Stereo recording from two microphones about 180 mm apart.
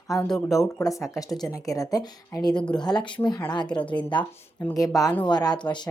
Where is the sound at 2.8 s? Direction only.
25° left (ahead or behind).